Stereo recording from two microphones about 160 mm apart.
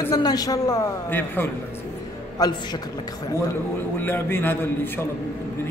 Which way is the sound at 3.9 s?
15° left (ahead or behind).